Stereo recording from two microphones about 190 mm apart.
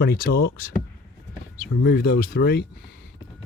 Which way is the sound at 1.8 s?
60° left (ahead or behind).